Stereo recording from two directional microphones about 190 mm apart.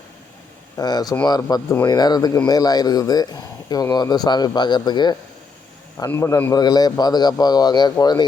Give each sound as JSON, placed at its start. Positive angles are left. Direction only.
{"t": 0.8, "sound": "speech", "side_deg": 20}